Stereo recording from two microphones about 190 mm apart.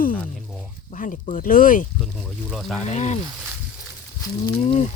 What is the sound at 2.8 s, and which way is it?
Speech, 35° left (ahead or behind).